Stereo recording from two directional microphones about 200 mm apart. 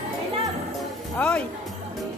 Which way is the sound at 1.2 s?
5° left (ahead or behind).